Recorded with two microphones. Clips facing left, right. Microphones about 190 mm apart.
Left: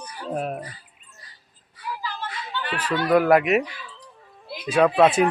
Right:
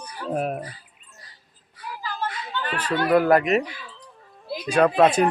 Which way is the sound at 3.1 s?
Centre (ahead or behind).